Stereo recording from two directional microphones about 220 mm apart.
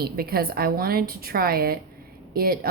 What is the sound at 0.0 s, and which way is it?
A woman's voice, 45° right (ahead or behind).